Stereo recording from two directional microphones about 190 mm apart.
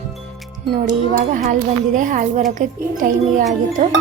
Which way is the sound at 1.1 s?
45° right (ahead or behind).